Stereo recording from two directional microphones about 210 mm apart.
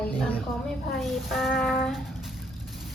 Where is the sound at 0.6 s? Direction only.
Centre (ahead or behind).